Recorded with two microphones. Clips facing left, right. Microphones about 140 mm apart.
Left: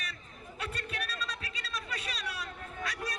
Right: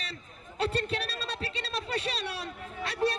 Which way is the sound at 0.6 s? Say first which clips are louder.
Right 10 dB; 30° right (ahead or behind).